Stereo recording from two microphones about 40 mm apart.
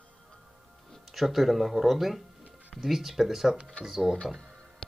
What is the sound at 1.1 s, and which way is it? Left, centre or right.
Speech, centre.